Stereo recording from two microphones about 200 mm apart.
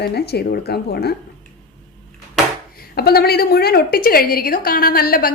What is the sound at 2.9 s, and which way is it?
A woman's voice, 50° left (ahead or behind).